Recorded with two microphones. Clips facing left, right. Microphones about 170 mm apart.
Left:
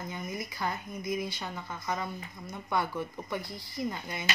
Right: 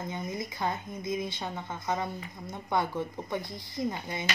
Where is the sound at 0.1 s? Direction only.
25° right (ahead or behind).